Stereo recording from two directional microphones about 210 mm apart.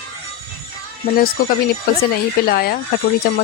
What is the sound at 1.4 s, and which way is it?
A woman's voice, 45° left (ahead or behind).